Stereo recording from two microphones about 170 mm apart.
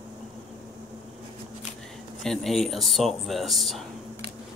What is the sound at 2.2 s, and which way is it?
Speech, centre (ahead or behind).